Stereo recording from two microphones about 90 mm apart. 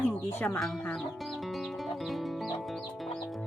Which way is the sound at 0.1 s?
30° left (ahead or behind).